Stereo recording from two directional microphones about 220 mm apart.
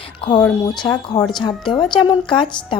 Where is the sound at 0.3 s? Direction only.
15° left (ahead or behind).